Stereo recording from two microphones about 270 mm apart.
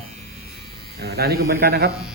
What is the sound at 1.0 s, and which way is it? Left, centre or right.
Speech, right.